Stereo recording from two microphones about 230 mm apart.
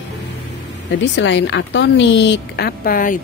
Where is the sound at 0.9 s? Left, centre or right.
Left.